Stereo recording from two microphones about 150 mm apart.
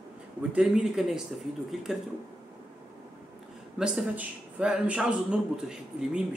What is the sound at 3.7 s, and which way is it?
Speech, 5° right (ahead or behind).